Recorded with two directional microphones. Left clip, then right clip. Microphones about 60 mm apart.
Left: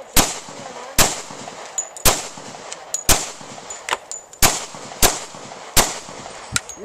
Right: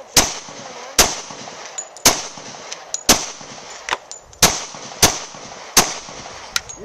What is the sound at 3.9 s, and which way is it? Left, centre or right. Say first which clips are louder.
Gunshot: right 9 dB; centre.